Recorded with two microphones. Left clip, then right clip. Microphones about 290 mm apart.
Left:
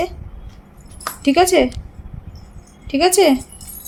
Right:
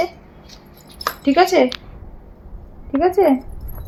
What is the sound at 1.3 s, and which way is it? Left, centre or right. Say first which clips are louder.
Speech: even; centre.